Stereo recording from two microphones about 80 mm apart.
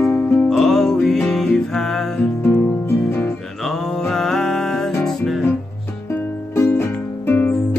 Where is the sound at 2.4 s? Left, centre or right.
Left.